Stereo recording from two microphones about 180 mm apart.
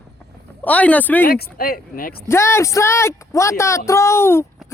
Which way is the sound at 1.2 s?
55° left (ahead or behind).